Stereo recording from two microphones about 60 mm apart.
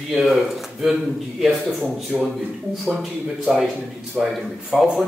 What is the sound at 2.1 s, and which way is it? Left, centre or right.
Speech, centre.